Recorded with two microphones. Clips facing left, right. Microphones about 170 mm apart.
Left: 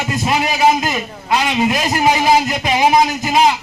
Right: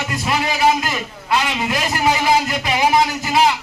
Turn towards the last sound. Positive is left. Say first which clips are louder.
# left 2 dB
turn(degrees=20)  # may be behind; listen again after turning